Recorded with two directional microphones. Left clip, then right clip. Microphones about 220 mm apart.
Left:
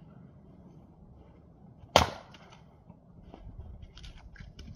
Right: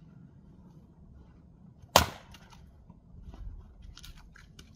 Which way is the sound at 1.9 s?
25° right (ahead or behind).